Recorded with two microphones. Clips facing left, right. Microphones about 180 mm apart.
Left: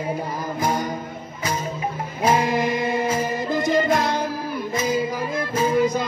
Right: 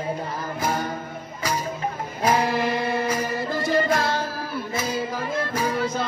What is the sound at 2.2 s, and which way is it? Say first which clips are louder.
Music: left 2 dB; 20° left (ahead or behind).